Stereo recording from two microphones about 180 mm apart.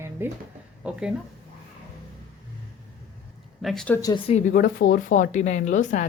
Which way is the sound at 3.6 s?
Centre (ahead or behind).